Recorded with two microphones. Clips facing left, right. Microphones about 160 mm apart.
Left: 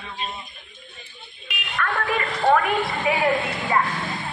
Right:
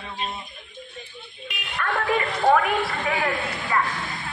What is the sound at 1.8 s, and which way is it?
Speech, 25° right (ahead or behind).